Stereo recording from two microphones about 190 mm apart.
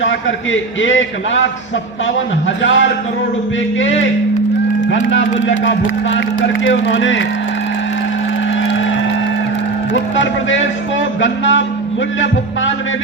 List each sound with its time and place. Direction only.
0.0 s a man's voice: 85° left
2.6 s a man's voice: 80° left
5.0 s speech: 75° left (ahead or behind)
10.2 s a man's voice: 80° left